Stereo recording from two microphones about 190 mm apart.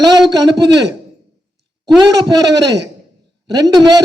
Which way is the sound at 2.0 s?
25° right (ahead or behind).